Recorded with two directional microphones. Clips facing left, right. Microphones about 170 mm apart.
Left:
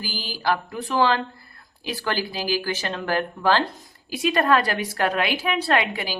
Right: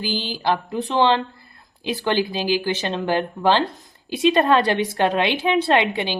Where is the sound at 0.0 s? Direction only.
20° right (ahead or behind).